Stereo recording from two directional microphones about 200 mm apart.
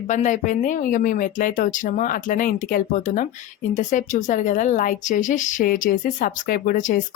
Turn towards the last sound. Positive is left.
turn(degrees=40)  # may be behind; listen again after turning